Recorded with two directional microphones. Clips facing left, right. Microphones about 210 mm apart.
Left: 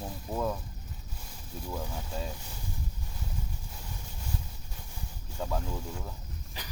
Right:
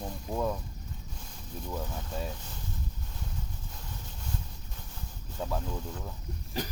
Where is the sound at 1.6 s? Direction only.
5° left (ahead or behind).